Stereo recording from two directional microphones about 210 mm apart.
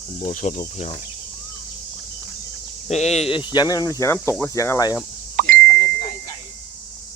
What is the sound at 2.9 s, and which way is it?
Speech, 30° left (ahead or behind).